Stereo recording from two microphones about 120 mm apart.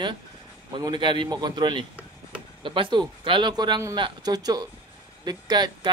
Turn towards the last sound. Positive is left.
turn(degrees=-35)  # may be behind; listen again after turning